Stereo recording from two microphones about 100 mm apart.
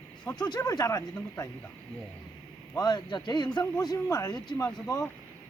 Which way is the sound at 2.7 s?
45° left (ahead or behind).